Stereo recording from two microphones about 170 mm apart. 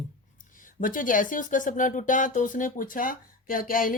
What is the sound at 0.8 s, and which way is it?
Speech, 50° left (ahead or behind).